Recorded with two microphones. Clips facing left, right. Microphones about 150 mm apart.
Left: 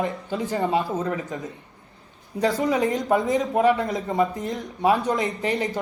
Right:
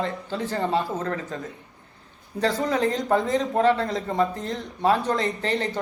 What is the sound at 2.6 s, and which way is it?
Speech, 15° left (ahead or behind).